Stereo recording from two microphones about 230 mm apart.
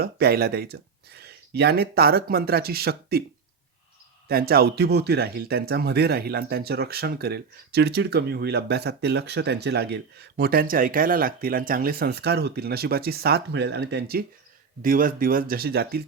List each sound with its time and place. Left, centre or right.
0.0 s speech: right
4.3 s speech: right